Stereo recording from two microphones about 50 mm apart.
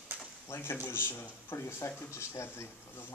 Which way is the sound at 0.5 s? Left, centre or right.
Left.